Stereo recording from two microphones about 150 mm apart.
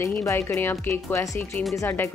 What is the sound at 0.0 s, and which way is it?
A woman's voice, 20° left (ahead or behind).